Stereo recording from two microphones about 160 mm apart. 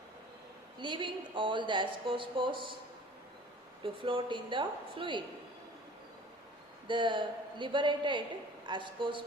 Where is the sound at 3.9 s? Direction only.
30° right (ahead or behind).